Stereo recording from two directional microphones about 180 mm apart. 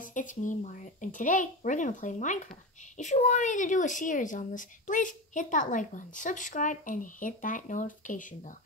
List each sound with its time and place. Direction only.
0.0 s speech: 45° left (ahead or behind)